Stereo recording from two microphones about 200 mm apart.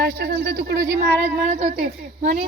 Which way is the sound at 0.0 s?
55° right (ahead or behind).